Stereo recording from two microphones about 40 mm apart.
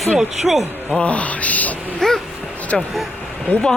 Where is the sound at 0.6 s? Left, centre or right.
Right.